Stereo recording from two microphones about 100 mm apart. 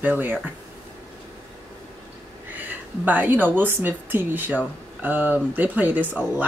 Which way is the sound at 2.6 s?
15° right (ahead or behind).